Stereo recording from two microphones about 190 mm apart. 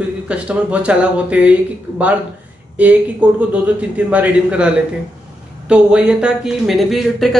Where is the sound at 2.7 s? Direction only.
10° right (ahead or behind).